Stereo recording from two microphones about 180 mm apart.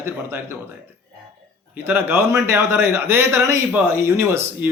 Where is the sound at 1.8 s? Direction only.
10° right (ahead or behind).